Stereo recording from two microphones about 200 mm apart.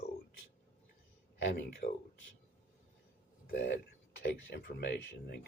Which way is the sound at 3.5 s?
60° left (ahead or behind).